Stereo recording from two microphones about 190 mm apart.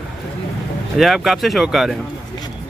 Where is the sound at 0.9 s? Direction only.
Centre (ahead or behind).